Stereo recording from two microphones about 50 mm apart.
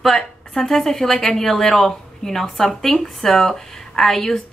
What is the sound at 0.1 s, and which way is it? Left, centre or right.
A woman's voice, centre.